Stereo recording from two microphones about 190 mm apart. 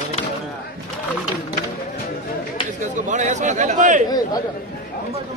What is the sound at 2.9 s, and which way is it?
A man's voice, 40° right (ahead or behind).